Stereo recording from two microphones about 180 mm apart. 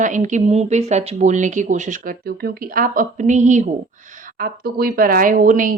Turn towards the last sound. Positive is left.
turn(degrees=-50)  # may be behind; listen again after turning